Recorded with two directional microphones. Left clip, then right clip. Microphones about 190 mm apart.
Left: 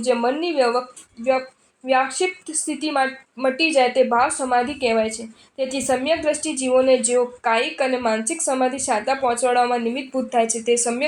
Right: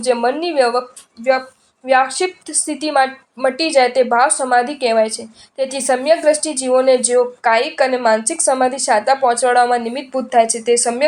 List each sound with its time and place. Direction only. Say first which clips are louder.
0.0 s speech: right 4 dB; 20° right (ahead or behind)
1.9 s speech: right 5 dB; 20° right (ahead or behind)